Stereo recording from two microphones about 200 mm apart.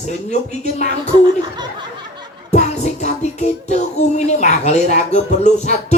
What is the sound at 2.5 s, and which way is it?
Music, 35° left (ahead or behind).